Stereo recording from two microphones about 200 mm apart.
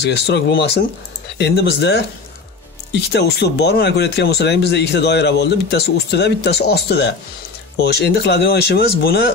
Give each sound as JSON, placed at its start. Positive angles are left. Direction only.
{"t": 0.0, "sound": "speech", "side_deg": 55}